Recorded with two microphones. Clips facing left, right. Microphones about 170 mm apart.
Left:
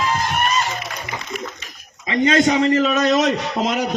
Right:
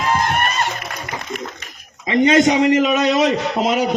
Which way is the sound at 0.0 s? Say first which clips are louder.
Right 2 dB; 60° right (ahead or behind).